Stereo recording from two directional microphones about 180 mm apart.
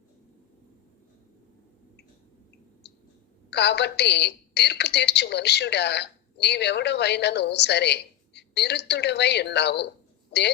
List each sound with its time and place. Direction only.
3.5 s a woman's voice: 70° left (ahead or behind)